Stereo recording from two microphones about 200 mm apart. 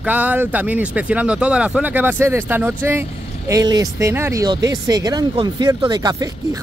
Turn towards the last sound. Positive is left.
turn(degrees=-20)  # may be behind; listen again after turning